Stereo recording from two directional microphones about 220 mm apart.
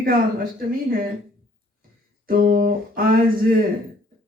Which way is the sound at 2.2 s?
40° right (ahead or behind).